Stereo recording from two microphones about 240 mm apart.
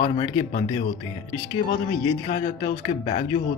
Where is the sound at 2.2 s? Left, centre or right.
Left.